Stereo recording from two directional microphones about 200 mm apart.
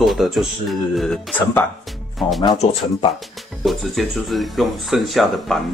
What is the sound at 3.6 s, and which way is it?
Speech, centre (ahead or behind).